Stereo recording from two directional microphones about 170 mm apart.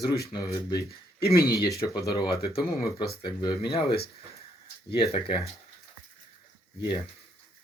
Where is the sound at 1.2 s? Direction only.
65° left (ahead or behind).